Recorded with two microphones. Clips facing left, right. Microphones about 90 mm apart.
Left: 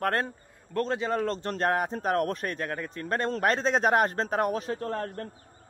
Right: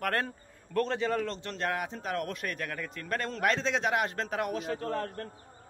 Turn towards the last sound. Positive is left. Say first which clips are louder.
# left 2 dB
turn(degrees=35)  # may be behind; listen again after turning